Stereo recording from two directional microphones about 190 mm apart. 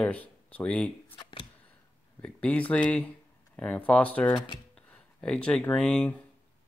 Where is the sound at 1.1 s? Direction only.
25° left (ahead or behind).